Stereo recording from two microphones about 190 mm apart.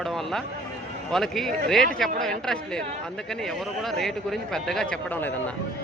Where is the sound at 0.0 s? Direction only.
Centre (ahead or behind).